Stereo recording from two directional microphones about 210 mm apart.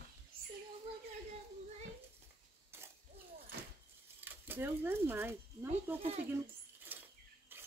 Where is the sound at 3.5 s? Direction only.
50° right (ahead or behind).